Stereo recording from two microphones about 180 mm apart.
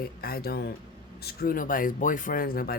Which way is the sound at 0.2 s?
55° left (ahead or behind).